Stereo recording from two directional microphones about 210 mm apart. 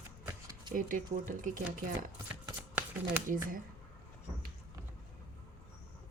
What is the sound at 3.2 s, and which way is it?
Speech, 40° right (ahead or behind).